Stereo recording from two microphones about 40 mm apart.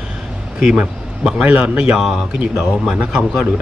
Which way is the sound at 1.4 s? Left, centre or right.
Right.